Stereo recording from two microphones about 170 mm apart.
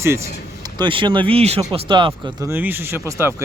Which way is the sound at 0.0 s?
15° right (ahead or behind).